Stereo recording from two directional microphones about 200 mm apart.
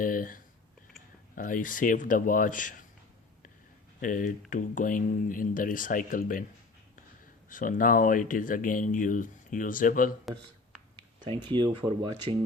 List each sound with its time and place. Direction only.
0.0 s speech: 45° left (ahead or behind)
4.0 s speech: 40° left (ahead or behind)
7.5 s speech: 40° left (ahead or behind)
10.3 s speech: centre (ahead or behind)
11.5 s speech: 25° right (ahead or behind)